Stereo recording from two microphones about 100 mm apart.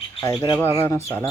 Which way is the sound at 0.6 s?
25° left (ahead or behind).